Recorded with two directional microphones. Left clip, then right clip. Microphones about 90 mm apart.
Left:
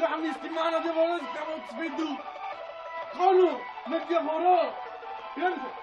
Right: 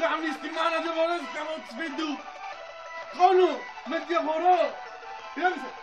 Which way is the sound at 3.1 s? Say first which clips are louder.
Right 2 dB; 25° left (ahead or behind).